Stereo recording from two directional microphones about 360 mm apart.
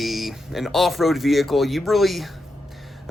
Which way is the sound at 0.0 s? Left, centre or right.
Centre.